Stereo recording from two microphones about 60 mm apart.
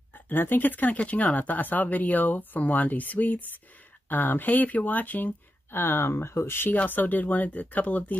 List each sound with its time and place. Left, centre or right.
0.1 s speech: left